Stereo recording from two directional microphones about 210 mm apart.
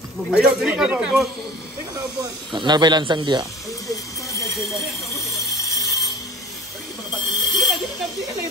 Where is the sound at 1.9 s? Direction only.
20° right (ahead or behind).